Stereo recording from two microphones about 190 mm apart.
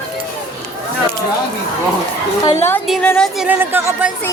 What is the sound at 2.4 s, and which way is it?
Speech, 15° left (ahead or behind).